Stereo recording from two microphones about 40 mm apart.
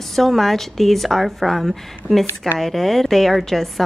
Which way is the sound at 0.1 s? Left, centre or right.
Centre.